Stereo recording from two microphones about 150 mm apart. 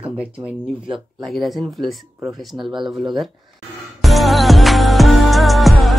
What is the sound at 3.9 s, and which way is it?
Music, centre (ahead or behind).